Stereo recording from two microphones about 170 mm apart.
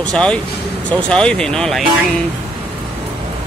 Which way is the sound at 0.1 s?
5° left (ahead or behind).